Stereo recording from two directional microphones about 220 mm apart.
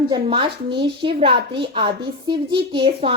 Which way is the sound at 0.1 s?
20° right (ahead or behind).